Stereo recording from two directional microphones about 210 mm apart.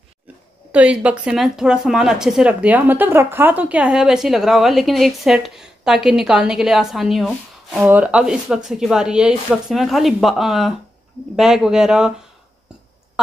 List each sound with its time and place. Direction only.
0.7 s speech: 5° right (ahead or behind)